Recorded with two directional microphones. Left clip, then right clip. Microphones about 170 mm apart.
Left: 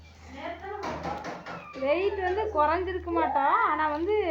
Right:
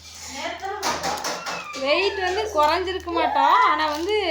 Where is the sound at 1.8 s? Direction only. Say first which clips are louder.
Right 5 dB; 10° right (ahead or behind).